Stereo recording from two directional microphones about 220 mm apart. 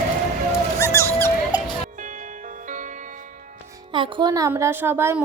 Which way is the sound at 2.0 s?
35° right (ahead or behind).